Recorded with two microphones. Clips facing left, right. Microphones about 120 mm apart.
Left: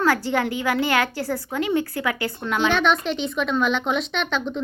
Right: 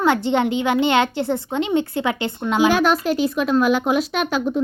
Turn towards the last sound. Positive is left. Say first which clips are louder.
# right 4 dB
turn(degrees=-5)  # may be behind; listen again after turning